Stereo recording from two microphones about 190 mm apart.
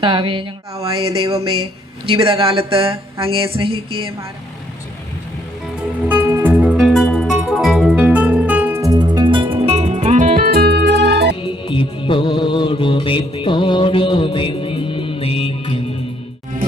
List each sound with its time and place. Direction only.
0.0 s speech: 25° right (ahead or behind)
2.0 s speech: 30° right (ahead or behind)
6.1 s music: 10° right (ahead or behind); by 11.3 s 60° right (ahead or behind)
11.6 s music: 25° left (ahead or behind)